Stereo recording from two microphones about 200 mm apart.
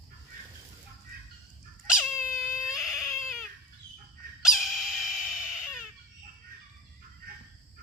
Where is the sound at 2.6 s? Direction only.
Centre (ahead or behind).